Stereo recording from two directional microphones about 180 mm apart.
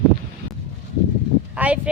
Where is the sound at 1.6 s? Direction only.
10° right (ahead or behind).